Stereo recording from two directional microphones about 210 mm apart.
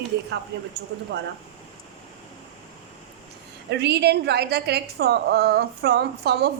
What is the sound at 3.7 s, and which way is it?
A woman's voice, 55° right (ahead or behind).